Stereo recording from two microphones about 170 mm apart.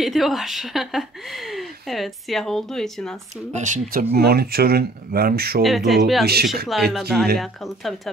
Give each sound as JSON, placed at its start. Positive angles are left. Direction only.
{"t": 0.0, "sound": "speech", "side_deg": 0}
{"t": 3.5, "sound": "speech", "side_deg": -45}
{"t": 4.1, "sound": "speech", "side_deg": -65}
{"t": 5.6, "sound": "speech", "side_deg": 0}
{"t": 6.2, "sound": "speech", "side_deg": -70}
{"t": 6.9, "sound": "speech", "side_deg": 0}